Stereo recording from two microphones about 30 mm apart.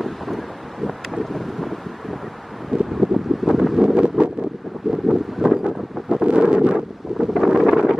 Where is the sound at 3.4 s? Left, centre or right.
Centre.